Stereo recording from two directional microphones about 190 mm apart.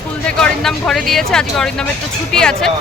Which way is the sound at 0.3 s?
5° left (ahead or behind).